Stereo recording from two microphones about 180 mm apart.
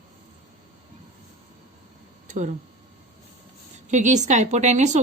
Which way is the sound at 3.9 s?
40° right (ahead or behind).